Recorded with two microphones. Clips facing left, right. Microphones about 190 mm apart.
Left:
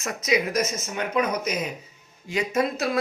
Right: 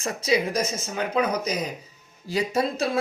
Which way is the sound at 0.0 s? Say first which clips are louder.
Right 1 dB; 30° right (ahead or behind).